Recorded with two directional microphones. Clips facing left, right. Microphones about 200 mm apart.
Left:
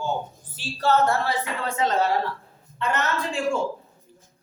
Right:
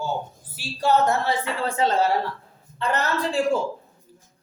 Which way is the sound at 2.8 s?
35° right (ahead or behind).